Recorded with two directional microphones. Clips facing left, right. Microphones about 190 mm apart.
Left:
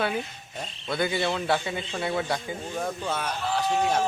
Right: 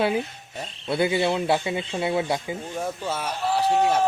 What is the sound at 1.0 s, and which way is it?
Speech, 10° right (ahead or behind).